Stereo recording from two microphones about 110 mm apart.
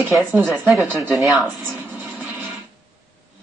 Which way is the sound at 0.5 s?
Centre (ahead or behind).